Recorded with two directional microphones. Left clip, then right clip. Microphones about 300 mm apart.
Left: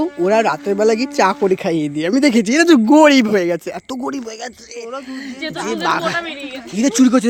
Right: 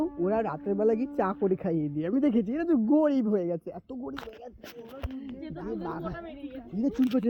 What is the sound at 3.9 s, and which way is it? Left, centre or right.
Speech, left.